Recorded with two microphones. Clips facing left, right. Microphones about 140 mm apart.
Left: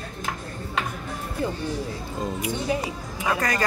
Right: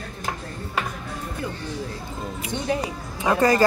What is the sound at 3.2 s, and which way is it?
Speech, 30° right (ahead or behind).